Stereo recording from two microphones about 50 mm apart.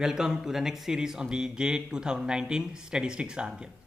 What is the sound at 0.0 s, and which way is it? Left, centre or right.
Speech, centre.